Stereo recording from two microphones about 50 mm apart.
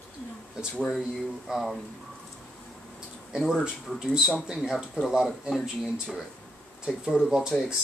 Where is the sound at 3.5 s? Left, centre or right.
Centre.